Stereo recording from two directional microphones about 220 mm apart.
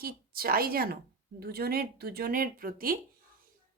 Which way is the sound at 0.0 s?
45° right (ahead or behind).